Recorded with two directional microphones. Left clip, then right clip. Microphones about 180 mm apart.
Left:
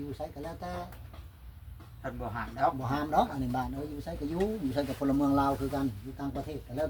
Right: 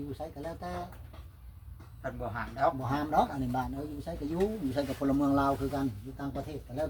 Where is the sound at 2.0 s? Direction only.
35° right (ahead or behind).